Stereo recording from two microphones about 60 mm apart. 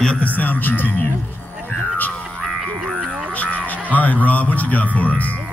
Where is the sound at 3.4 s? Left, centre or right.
Left.